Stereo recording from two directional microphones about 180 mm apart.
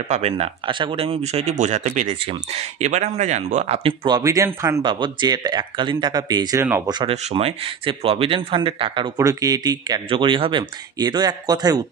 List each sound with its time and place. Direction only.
0.1 s speech: 35° right (ahead or behind); by 6.8 s 15° right (ahead or behind)
6.9 s speech: 30° right (ahead or behind)